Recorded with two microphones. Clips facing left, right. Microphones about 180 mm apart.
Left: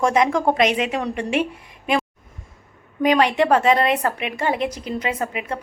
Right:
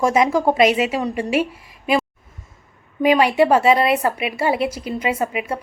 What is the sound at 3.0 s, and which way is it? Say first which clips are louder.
A woman's voice: right 2 dB; 10° right (ahead or behind).